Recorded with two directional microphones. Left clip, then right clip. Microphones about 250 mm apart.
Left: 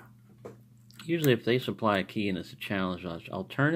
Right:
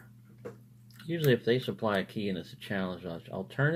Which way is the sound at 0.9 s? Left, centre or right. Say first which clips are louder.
Left 5 dB; left.